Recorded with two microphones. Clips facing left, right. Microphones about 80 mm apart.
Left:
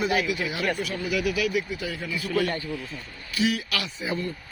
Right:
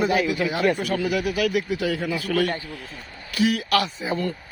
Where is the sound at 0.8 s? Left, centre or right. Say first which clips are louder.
Right 4 dB; right.